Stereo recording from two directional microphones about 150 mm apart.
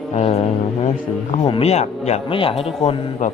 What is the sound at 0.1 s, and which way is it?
Speech, 45° left (ahead or behind).